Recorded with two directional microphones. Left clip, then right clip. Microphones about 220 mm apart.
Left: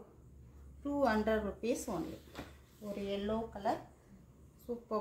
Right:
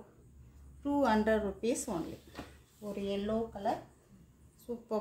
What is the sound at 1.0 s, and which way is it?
Speech, 40° right (ahead or behind).